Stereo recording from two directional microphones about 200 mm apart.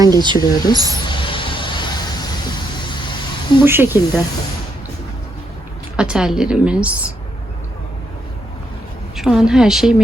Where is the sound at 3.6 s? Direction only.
10° right (ahead or behind).